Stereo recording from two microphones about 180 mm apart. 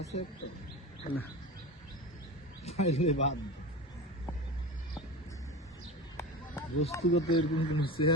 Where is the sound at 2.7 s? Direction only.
35° left (ahead or behind).